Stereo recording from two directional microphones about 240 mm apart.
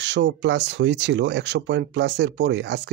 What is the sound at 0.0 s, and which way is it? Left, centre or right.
Speech, right.